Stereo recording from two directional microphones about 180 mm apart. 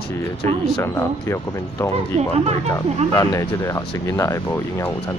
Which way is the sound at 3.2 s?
15° left (ahead or behind).